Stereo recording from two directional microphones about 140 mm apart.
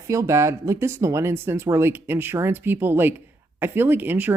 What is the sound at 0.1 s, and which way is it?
Speech, 20° right (ahead or behind).